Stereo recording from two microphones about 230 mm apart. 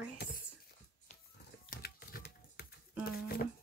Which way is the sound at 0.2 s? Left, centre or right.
Left.